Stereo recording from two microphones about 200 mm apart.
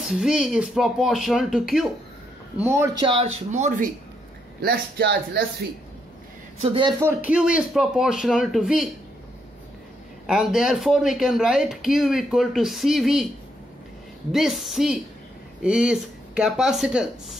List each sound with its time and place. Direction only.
0.0 s speech: centre (ahead or behind); by 3.9 s 35° right (ahead or behind)
4.6 s speech: 50° right (ahead or behind)
6.6 s speech: 25° right (ahead or behind)
7.0 s speech: 10° right (ahead or behind)
10.2 s speech: 5° right (ahead or behind)
14.3 s speech: centre (ahead or behind)